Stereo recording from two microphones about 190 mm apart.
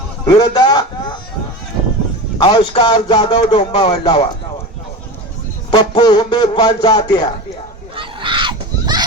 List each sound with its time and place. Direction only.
0.3 s speech: 20° left (ahead or behind)
2.4 s speech: 20° left (ahead or behind)
5.7 s speech: 25° left (ahead or behind)
7.9 s a sound: 25° right (ahead or behind)